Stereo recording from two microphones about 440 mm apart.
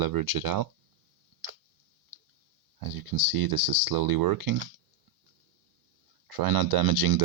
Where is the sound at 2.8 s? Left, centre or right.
Right.